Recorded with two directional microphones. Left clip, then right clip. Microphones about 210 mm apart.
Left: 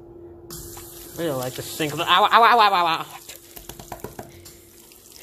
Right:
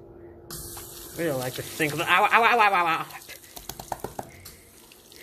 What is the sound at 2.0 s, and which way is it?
Speech, 15° left (ahead or behind).